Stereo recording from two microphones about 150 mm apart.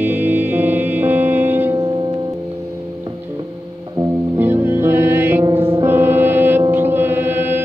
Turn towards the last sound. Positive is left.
turn(degrees=-15)  # may be behind; listen again after turning